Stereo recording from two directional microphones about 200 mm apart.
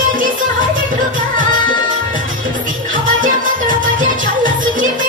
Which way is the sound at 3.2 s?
40° right (ahead or behind).